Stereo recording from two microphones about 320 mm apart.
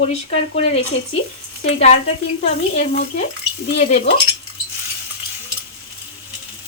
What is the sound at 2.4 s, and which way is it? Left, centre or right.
Speech, centre.